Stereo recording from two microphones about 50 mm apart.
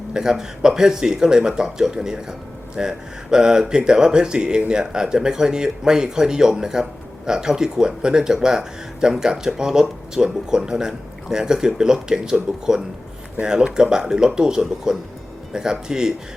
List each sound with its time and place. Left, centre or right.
0.1 s a man's voice: centre